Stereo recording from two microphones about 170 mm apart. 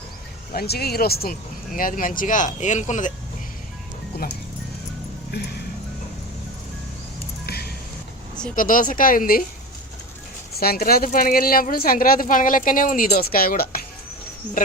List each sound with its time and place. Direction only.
0.5 s speech: 65° left (ahead or behind); by 3.1 s 45° left (ahead or behind)
5.3 s speech: 75° left (ahead or behind)
7.4 s music: 65° left (ahead or behind)
8.5 s speech: 55° left (ahead or behind)
10.6 s a woman's voice: 60° left (ahead or behind)